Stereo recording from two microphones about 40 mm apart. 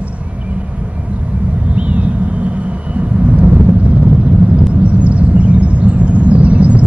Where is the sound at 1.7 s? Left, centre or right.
Right.